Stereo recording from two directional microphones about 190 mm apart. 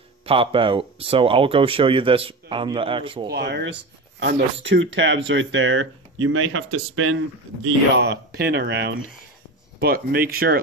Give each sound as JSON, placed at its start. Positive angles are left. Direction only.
{"t": 0.2, "sound": "speech", "side_deg": -30}
{"t": 3.3, "sound": "speech", "side_deg": -60}
{"t": 4.2, "sound": "speech", "side_deg": -75}
{"t": 7.6, "sound": "speech", "side_deg": -70}